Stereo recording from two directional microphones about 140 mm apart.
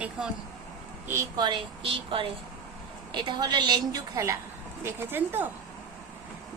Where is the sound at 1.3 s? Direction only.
35° right (ahead or behind); by 5.4 s 15° right (ahead or behind).